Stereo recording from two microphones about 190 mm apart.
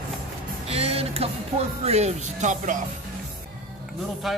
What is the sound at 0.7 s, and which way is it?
Music, 30° right (ahead or behind).